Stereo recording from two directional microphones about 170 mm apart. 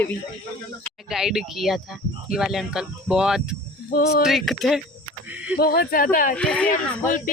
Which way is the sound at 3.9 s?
75° left (ahead or behind).